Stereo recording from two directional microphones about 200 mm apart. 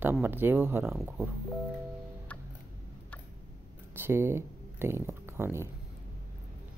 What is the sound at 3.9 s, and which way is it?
Speech, 10° right (ahead or behind).